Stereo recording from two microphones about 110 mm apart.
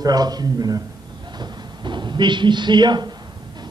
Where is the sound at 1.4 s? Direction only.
45° right (ahead or behind).